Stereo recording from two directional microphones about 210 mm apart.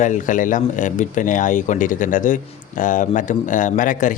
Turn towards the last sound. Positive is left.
turn(degrees=40)  # may be behind; listen again after turning